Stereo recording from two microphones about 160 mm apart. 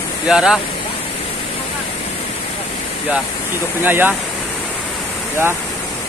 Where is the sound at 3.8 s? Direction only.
10° right (ahead or behind).